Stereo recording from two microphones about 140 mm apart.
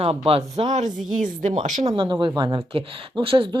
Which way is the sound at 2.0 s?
35° right (ahead or behind).